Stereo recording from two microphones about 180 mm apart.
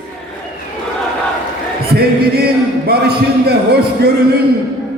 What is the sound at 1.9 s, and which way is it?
Singing, 60° right (ahead or behind).